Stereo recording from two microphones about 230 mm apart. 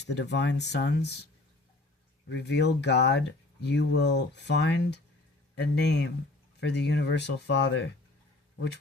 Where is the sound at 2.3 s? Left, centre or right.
Left.